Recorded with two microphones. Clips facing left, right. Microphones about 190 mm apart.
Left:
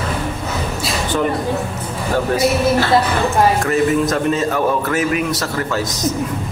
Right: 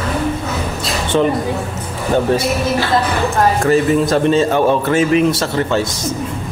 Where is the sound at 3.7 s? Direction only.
30° right (ahead or behind).